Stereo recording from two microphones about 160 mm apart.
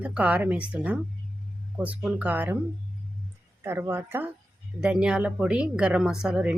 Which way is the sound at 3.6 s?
15° right (ahead or behind).